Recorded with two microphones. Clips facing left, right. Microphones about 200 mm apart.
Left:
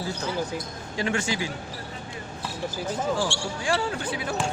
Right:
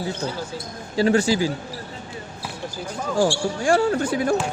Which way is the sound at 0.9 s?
35° right (ahead or behind).